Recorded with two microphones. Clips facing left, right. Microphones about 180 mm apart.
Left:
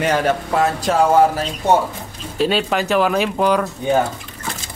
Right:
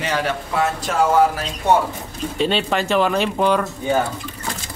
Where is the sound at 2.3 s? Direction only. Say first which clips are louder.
Left 2 dB; 5° left (ahead or behind).